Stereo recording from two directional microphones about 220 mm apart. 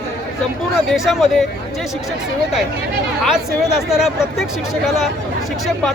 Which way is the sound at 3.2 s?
Centre (ahead or behind).